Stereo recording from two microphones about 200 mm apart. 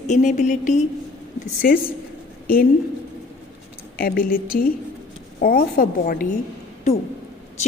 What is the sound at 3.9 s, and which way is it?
A woman's voice, 45° left (ahead or behind).